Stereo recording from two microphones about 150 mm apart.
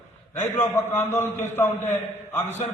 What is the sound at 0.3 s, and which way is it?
A man's voice, 15° left (ahead or behind).